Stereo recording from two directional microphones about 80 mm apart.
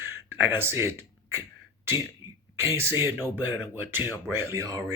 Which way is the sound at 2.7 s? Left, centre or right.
Right.